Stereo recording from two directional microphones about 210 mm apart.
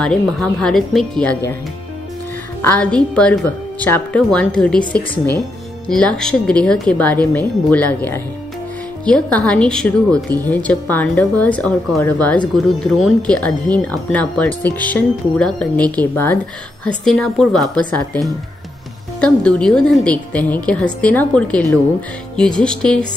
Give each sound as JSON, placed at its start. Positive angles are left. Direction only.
{"t": 0.0, "sound": "a woman's voice", "side_deg": 5}
{"t": 2.6, "sound": "a woman's voice", "side_deg": 5}